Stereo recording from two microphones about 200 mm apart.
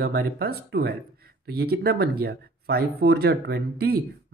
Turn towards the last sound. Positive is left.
turn(degrees=-50)  # may be behind; listen again after turning